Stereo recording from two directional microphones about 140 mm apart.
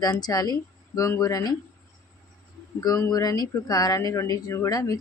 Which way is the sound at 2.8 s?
25° left (ahead or behind).